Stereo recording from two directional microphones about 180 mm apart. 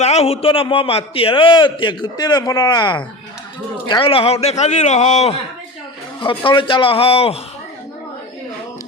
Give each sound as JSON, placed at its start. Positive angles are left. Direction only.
{"t": 0.0, "sound": "a man's voice", "side_deg": 35}